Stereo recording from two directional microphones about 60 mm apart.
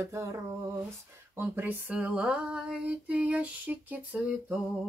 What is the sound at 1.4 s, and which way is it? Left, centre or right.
Speech, right.